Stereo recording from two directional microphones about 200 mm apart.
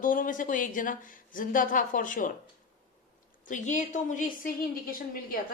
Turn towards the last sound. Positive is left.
turn(degrees=45)  # may be behind; listen again after turning